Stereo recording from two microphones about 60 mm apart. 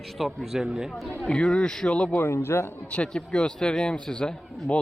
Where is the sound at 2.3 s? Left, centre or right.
Left.